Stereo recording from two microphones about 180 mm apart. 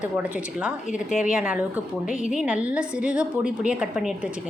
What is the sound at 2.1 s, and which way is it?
Speech, 45° left (ahead or behind).